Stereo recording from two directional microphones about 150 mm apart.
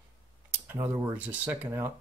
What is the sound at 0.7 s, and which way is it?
Speech, 15° right (ahead or behind).